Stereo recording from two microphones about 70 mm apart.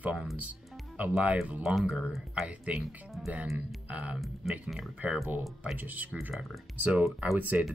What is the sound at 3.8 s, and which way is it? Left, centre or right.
Music, centre.